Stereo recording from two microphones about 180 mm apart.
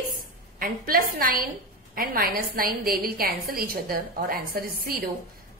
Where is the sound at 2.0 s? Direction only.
55° right (ahead or behind).